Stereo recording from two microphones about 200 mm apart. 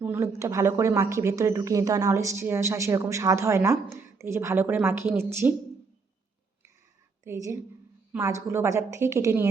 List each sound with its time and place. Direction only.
0.0 s speech: 10° right (ahead or behind)
7.3 s speech: 15° right (ahead or behind)